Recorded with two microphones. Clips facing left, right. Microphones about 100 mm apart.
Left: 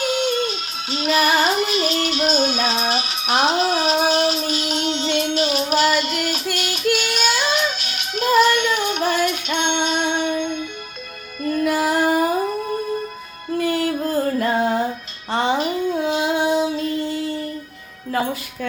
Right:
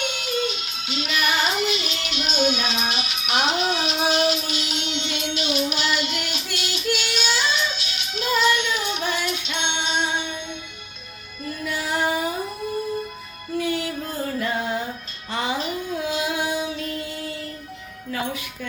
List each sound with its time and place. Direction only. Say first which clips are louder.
0.0 s music: left 6 dB; 35° left (ahead or behind)
13.6 s music: left 5 dB; 40° left (ahead or behind)
16.0 s female singing: left 4 dB; 30° left (ahead or behind)